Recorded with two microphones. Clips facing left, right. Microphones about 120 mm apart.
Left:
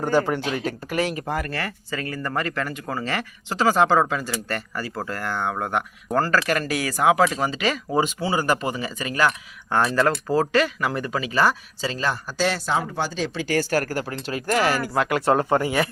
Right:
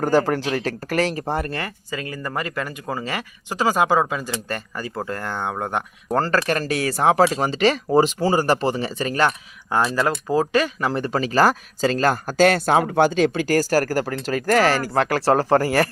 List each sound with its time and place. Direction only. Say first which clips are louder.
0.0 s speech: right 3 dB; 40° right (ahead or behind)
9.9 s speech: even; 15° right (ahead or behind)
10.8 s speech: right 3 dB; 30° right (ahead or behind)